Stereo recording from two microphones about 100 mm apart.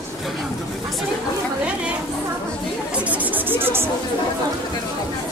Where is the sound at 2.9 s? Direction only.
15° right (ahead or behind).